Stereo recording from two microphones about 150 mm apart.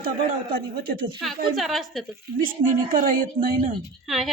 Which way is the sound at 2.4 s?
65° right (ahead or behind).